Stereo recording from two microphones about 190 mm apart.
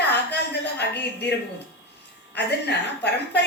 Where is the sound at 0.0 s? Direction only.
60° left (ahead or behind).